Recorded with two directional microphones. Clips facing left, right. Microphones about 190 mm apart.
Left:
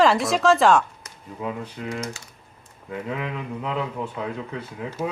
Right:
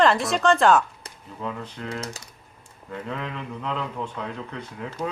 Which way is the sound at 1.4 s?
10° left (ahead or behind).